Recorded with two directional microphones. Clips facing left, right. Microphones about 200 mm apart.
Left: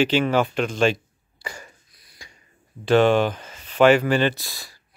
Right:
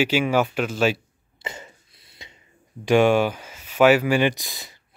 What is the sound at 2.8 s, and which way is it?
Speech, 10° right (ahead or behind).